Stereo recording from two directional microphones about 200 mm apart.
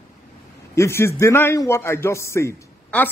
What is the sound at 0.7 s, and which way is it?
A man's voice, 15° left (ahead or behind).